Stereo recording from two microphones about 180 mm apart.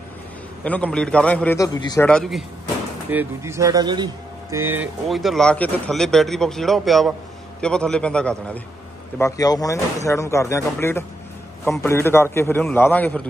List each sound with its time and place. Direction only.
0.7 s a man's voice: 5° left (ahead or behind)
1.6 s speech: 20° left (ahead or behind)
2.0 s speech: centre (ahead or behind)
3.1 s speech: 10° right (ahead or behind)
5.0 s speech: centre (ahead or behind)
9.2 s a man's voice: 20° left (ahead or behind)